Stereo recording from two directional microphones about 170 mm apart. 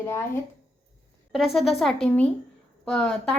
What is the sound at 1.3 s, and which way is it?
A woman's voice, centre (ahead or behind).